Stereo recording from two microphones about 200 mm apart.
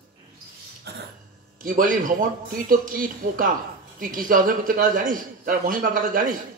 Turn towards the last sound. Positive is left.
turn(degrees=-45)  # may be behind; listen again after turning